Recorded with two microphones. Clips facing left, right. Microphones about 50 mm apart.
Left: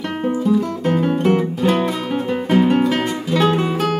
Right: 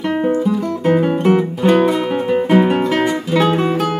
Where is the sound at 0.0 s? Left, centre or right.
Centre.